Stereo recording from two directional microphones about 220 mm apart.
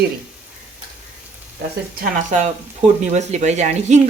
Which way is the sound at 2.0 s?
35° right (ahead or behind).